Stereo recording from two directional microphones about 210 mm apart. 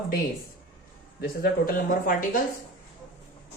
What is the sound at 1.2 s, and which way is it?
Speech, 45° left (ahead or behind).